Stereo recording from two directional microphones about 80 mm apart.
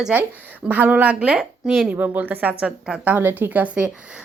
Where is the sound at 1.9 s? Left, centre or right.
Right.